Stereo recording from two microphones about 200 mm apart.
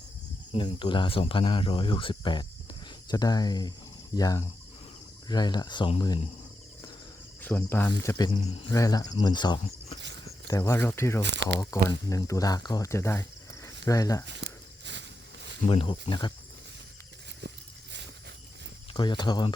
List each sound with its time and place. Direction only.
0.5 s speech: 25° left (ahead or behind)
7.6 s speech: 10° left (ahead or behind)
8.4 s speech: 30° left (ahead or behind)
8.7 s speech: 15° left (ahead or behind)
11.2 s a sound: 60° right (ahead or behind)
11.6 s speech: 15° left (ahead or behind)
14.4 s a sound: 60° right (ahead or behind)
15.6 s speech: 25° left (ahead or behind)
17.4 s horse: 60° right (ahead or behind)
18.9 s speech: 20° left (ahead or behind)